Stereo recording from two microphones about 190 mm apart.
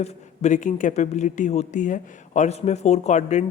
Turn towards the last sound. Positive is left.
turn(degrees=40)  # may be behind; listen again after turning